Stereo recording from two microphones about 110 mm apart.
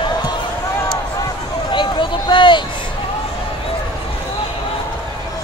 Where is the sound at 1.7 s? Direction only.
45° left (ahead or behind).